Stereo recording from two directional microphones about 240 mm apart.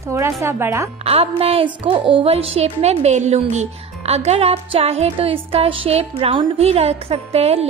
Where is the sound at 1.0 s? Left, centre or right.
Right.